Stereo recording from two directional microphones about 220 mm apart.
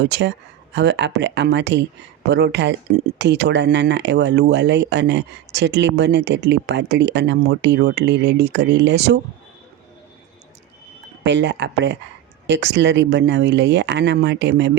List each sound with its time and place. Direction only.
0.0 s speech: 50° right (ahead or behind)
11.2 s speech: 55° right (ahead or behind)